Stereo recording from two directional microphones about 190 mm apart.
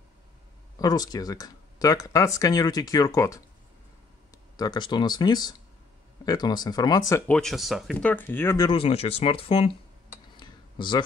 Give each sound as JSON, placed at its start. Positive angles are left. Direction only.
{"t": 0.7, "sound": "speech", "side_deg": 20}
{"t": 4.6, "sound": "speech", "side_deg": 25}
{"t": 7.3, "sound": "speech", "side_deg": 0}
{"t": 8.6, "sound": "speech", "side_deg": 30}
{"t": 10.4, "sound": "a sound", "side_deg": 25}